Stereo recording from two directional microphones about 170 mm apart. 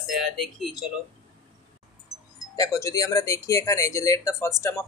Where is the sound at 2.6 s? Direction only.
20° left (ahead or behind).